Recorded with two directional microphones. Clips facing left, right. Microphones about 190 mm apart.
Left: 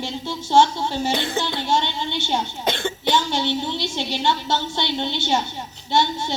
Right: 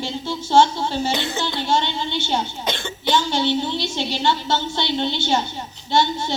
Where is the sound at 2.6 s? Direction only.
55° left (ahead or behind).